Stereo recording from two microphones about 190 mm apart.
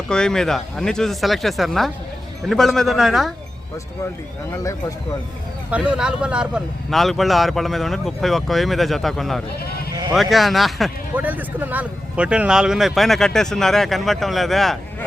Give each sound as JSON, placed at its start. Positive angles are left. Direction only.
{"t": 0.1, "sound": "speech", "side_deg": 5}
{"t": 4.5, "sound": "speech", "side_deg": 15}
{"t": 5.7, "sound": "speech", "side_deg": -5}